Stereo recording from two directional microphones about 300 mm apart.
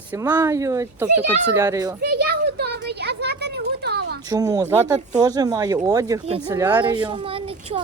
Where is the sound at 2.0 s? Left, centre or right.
Right.